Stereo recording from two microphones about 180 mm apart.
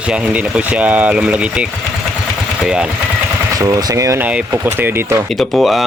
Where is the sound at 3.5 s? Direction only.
20° right (ahead or behind).